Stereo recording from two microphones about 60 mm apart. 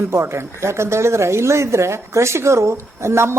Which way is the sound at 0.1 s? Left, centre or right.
Right.